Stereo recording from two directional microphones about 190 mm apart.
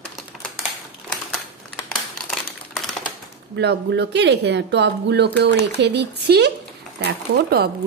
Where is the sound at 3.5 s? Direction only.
65° right (ahead or behind).